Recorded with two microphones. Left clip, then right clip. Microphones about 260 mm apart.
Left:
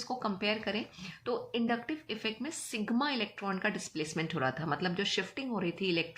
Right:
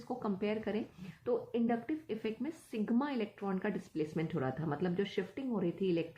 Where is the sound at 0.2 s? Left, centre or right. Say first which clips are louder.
Left 3 dB; centre.